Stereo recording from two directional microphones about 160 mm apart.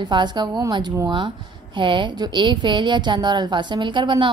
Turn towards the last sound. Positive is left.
turn(degrees=-30)  # may be behind; listen again after turning